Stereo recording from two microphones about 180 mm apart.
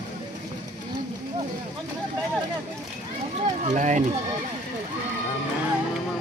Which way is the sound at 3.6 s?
40° right (ahead or behind).